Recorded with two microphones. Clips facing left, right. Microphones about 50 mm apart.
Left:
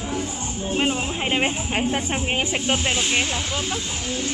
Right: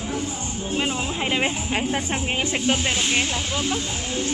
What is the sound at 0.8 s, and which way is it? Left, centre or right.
Music, left.